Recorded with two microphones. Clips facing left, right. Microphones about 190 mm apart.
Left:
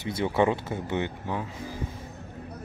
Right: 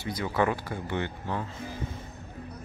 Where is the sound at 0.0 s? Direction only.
25° left (ahead or behind).